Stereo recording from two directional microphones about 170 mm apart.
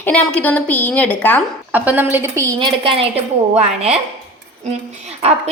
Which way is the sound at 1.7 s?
10° right (ahead or behind).